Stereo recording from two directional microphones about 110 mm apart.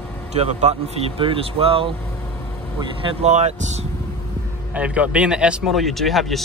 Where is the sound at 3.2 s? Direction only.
90° right.